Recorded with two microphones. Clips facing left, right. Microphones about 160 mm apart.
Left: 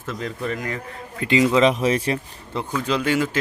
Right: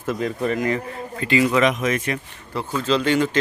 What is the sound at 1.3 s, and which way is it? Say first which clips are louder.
Speech: left 1 dB; 20° left (ahead or behind).